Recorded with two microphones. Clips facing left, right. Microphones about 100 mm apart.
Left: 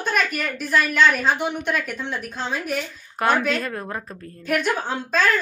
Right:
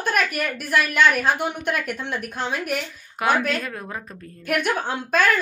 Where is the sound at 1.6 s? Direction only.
55° right (ahead or behind).